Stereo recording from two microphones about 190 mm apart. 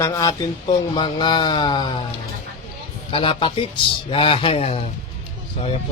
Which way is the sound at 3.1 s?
30° left (ahead or behind).